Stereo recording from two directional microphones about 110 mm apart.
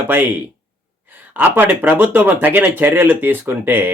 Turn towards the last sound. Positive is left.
turn(degrees=-20)  # may be behind; listen again after turning